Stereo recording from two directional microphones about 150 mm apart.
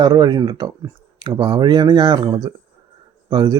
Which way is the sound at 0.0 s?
25° right (ahead or behind).